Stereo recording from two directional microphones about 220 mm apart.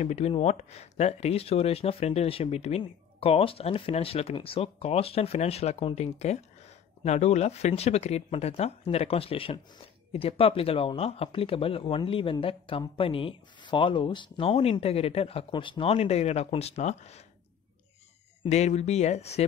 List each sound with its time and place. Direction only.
0.0 s speech: 30° left (ahead or behind)
18.4 s speech: 30° left (ahead or behind)